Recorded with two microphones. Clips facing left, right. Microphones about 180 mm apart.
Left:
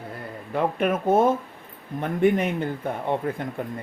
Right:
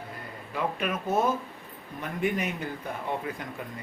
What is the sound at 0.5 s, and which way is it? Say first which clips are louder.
Speech: left 7 dB; 55° left (ahead or behind).